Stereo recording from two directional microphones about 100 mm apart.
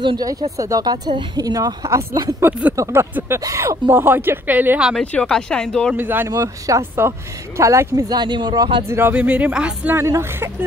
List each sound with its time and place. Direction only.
0.2 s speech: 35° right (ahead or behind)
3.9 s speech: 20° right (ahead or behind)
5.0 s speech: 10° left (ahead or behind)
5.9 s speech: 20° right (ahead or behind)
6.2 s speech: 35° right (ahead or behind)
8.1 s speech: 45° right (ahead or behind)
8.8 s speech: 25° right (ahead or behind)
9.1 s speech: 15° right (ahead or behind)
9.9 s speech: 30° right (ahead or behind)